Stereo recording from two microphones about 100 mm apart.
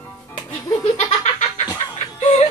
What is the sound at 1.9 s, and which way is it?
Music, 90° left.